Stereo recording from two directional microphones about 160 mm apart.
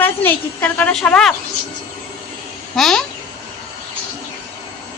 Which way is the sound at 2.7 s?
Centre (ahead or behind).